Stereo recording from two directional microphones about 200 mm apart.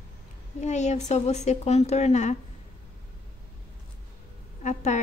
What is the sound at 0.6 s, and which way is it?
A woman's voice, 35° left (ahead or behind).